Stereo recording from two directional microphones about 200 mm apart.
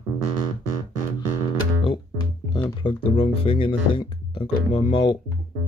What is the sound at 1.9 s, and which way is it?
Music, 20° left (ahead or behind).